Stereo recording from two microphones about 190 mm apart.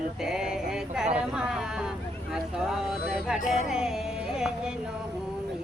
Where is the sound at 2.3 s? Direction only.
5° right (ahead or behind).